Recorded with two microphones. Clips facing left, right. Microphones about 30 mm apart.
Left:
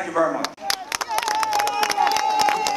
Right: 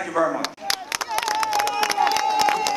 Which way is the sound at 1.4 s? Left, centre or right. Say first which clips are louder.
Even; right.